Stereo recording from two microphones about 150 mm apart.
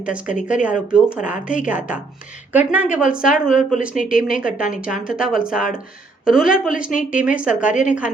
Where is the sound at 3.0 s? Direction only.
60° left (ahead or behind).